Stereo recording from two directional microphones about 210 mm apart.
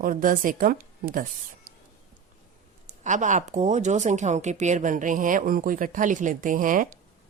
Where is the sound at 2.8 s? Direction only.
35° right (ahead or behind).